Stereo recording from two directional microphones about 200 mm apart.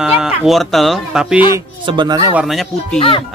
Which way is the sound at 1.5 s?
20° right (ahead or behind).